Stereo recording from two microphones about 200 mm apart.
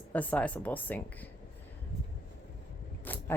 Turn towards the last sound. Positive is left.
turn(degrees=10)  # may be behind; listen again after turning